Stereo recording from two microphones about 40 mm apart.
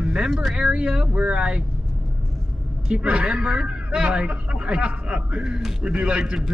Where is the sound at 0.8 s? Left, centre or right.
Centre.